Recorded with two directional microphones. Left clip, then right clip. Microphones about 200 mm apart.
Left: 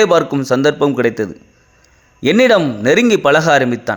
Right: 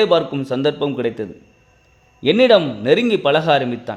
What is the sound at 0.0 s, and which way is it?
A man's voice, 20° left (ahead or behind).